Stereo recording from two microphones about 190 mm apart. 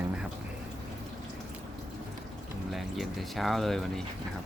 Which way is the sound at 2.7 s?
Centre (ahead or behind).